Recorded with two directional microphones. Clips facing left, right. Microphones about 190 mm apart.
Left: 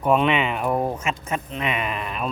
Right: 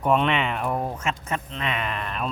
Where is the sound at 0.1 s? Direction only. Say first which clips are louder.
Left 3 dB; 5° left (ahead or behind).